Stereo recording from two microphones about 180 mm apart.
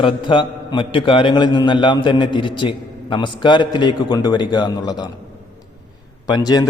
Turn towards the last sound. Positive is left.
turn(degrees=20)  # may be behind; listen again after turning